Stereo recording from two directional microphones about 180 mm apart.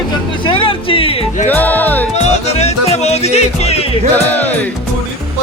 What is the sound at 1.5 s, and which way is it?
Music, 10° left (ahead or behind).